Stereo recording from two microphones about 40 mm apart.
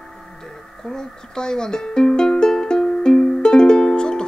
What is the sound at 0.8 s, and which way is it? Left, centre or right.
Speech, centre.